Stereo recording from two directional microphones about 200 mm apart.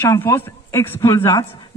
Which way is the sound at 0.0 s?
15° left (ahead or behind).